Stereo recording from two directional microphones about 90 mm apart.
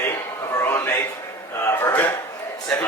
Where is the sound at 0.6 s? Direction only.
25° left (ahead or behind).